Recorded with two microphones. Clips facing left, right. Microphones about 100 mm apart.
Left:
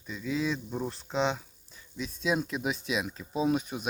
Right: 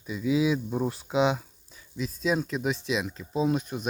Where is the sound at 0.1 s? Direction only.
10° right (ahead or behind).